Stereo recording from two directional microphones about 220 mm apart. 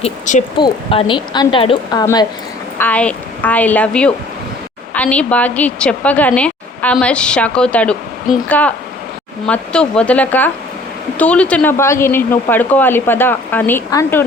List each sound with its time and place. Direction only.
0.0 s speech: 35° left (ahead or behind); by 2.2 s 20° left (ahead or behind)
2.7 s a woman's voice: 5° left (ahead or behind)